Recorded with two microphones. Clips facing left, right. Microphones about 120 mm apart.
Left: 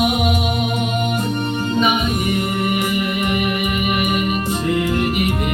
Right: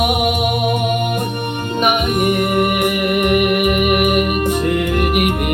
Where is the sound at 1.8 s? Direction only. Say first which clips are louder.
Right 4 dB; 60° right (ahead or behind).